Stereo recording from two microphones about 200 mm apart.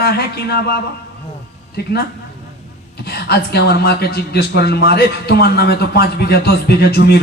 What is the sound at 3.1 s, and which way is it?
A man's voice, 55° left (ahead or behind).